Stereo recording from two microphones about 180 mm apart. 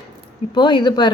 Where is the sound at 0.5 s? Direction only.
25° left (ahead or behind).